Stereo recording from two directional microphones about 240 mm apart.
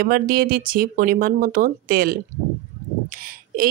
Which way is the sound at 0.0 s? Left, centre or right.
Right.